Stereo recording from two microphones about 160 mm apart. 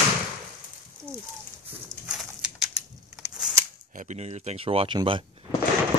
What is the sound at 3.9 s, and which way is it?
Speech, 45° right (ahead or behind).